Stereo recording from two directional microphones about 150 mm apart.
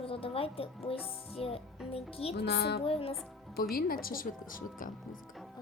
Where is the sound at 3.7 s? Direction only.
75° left (ahead or behind).